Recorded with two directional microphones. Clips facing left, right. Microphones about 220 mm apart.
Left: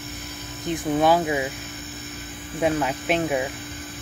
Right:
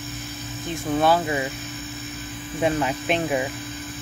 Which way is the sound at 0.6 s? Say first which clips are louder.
Left 1 dB; 15° left (ahead or behind).